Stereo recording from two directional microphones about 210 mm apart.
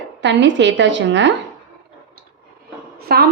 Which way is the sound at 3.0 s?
45° right (ahead or behind).